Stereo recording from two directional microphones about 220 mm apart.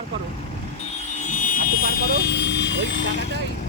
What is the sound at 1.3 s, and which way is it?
Vehicle, 35° left (ahead or behind).